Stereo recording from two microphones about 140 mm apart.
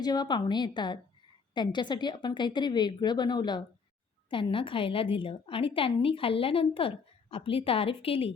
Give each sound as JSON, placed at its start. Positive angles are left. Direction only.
{"t": 0.0, "sound": "a woman's voice", "side_deg": 30}